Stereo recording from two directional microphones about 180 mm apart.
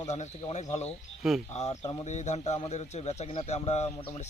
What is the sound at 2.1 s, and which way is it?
A man's voice, 40° left (ahead or behind).